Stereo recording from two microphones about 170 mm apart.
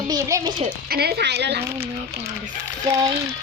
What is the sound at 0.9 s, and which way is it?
Speech, 70° right (ahead or behind).